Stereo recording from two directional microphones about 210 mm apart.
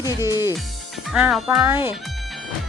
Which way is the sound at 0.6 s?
Centre (ahead or behind).